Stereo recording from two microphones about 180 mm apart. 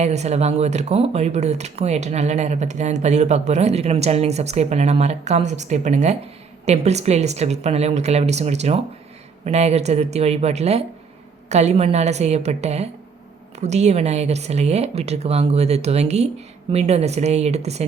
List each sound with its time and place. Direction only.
0.0 s speech: 40° right (ahead or behind)